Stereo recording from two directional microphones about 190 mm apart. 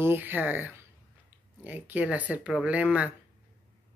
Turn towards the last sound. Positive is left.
turn(degrees=-5)  # may be behind; listen again after turning